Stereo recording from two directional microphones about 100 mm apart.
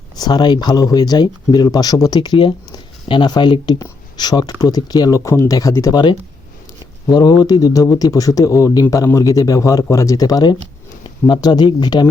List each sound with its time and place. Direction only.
0.2 s a man's voice: 45° left (ahead or behind)
7.1 s a man's voice: 40° left (ahead or behind)